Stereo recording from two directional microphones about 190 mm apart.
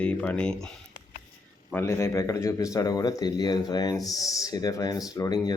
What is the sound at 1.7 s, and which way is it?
Speech, 15° left (ahead or behind).